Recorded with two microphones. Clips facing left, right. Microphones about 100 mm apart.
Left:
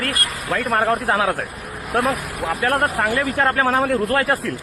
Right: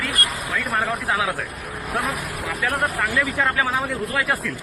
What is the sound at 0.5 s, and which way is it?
Speech, 60° left (ahead or behind).